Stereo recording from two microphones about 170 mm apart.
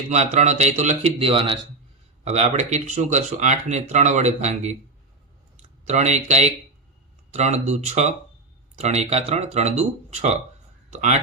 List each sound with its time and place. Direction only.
0.1 s speech: 40° right (ahead or behind)
5.9 s speech: 40° right (ahead or behind)